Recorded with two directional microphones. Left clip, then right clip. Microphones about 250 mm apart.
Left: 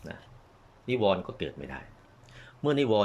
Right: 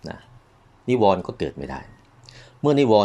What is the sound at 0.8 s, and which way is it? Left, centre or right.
Speech, right.